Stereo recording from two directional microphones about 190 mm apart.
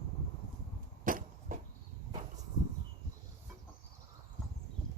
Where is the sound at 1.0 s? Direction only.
45° right (ahead or behind).